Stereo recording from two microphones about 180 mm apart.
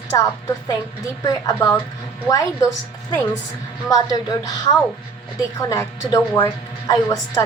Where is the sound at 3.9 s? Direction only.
20° left (ahead or behind).